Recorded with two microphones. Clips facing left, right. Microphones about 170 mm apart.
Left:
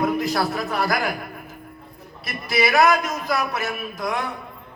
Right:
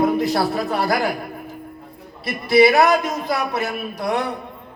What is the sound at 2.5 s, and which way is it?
A man's voice, 30° right (ahead or behind).